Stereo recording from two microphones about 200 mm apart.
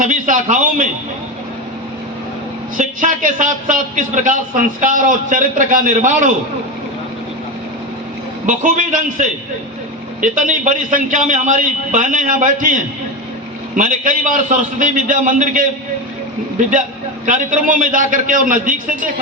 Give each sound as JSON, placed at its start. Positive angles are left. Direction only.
{"t": 0.0, "sound": "a sound", "side_deg": -40}
{"t": 2.7, "sound": "a man's voice", "side_deg": -40}
{"t": 8.4, "sound": "a man's voice", "side_deg": -40}